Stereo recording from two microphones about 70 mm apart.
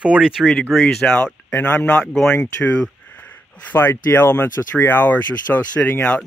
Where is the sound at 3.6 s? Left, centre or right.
Left.